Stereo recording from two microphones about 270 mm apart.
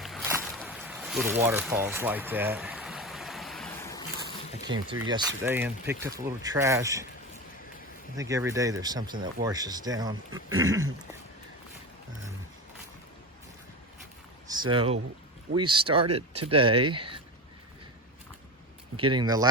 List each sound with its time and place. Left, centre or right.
0.0 s boat: centre
0.4 s a sound: centre
4.6 s speech: centre
8.1 s speech: centre
14.4 s a sound: centre
15.5 s speech: centre
18.9 s speech: centre